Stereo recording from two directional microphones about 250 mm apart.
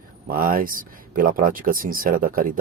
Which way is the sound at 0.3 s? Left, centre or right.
Right.